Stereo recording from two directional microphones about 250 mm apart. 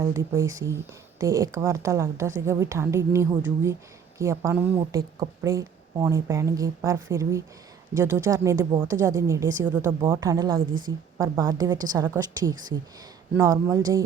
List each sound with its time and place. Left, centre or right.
0.0 s a woman's voice: centre